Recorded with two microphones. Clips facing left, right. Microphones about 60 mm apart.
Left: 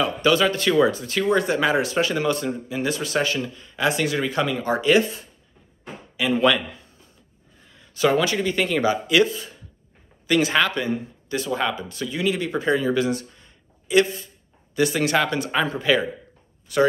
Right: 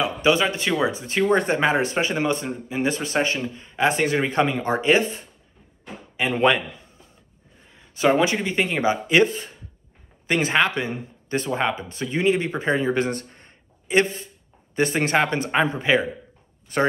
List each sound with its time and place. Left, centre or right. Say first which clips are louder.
0.0 s speech: left 1 dB; right
7.6 s speech: right 1 dB; right